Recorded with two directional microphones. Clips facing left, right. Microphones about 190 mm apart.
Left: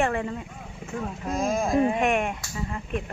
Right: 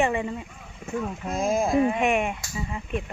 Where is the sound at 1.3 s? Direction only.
25° right (ahead or behind).